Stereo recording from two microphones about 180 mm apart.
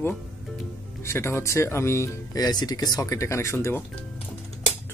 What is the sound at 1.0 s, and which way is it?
Speech, 15° left (ahead or behind).